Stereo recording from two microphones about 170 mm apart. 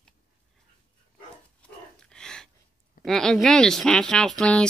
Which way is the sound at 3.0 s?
5° left (ahead or behind).